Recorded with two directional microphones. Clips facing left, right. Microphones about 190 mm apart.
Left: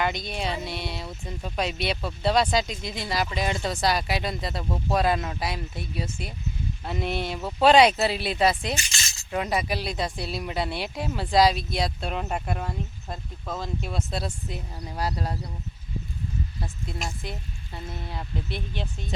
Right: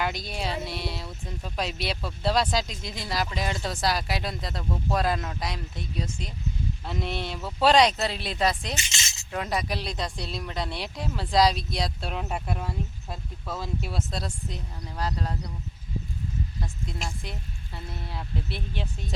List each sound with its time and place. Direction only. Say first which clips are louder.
0.0 s speech: left 2 dB; 5° right (ahead or behind)
8.7 s speech: left 3 dB; 20° right (ahead or behind)
9.3 s speech: left 3 dB; 5° left (ahead or behind)
16.8 s speech: left 3 dB; 5° left (ahead or behind)